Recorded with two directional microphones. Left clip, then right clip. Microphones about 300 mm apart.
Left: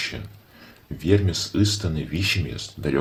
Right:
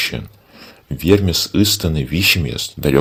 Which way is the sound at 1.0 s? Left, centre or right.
Right.